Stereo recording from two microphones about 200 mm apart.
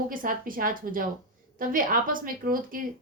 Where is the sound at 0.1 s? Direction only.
45° right (ahead or behind).